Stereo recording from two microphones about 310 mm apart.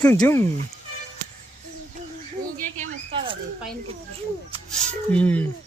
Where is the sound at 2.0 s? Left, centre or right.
Right.